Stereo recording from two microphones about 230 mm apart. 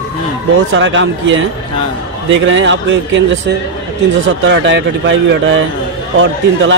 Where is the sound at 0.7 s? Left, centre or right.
Right.